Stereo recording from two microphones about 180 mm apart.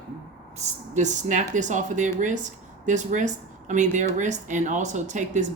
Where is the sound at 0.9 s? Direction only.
40° right (ahead or behind).